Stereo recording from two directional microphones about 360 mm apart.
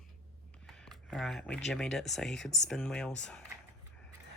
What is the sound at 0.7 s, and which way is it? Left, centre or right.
Speech, centre.